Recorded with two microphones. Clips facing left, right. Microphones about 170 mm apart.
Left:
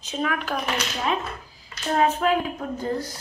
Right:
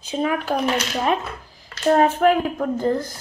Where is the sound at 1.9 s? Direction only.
50° right (ahead or behind).